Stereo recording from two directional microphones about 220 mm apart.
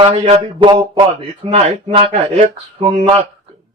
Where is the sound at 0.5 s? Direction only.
20° right (ahead or behind).